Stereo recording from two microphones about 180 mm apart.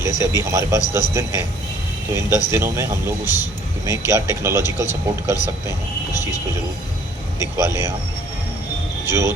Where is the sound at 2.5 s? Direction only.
15° right (ahead or behind).